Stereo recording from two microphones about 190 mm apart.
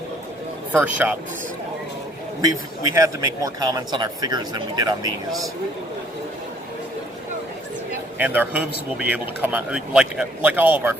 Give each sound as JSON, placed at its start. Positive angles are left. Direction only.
{"t": 0.7, "sound": "speech", "side_deg": -10}
{"t": 2.4, "sound": "a man's voice", "side_deg": -15}
{"t": 8.2, "sound": "speech", "side_deg": -10}